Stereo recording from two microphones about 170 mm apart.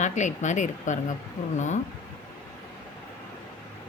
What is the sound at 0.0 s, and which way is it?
Speech, 45° left (ahead or behind).